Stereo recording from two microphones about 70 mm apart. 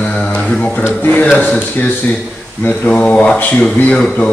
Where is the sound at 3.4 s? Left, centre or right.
Left.